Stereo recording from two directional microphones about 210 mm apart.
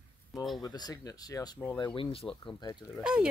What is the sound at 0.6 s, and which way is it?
Speech, 20° left (ahead or behind).